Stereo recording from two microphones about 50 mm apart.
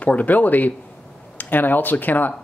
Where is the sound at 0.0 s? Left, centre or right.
Left.